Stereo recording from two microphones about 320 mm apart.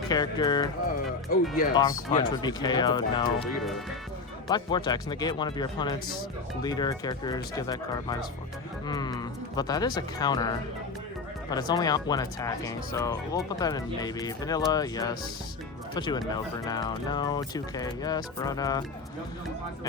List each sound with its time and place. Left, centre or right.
0.1 s speech: centre
1.3 s speech: left
1.7 s speech: centre
4.4 s speech: centre
11.5 s speech: centre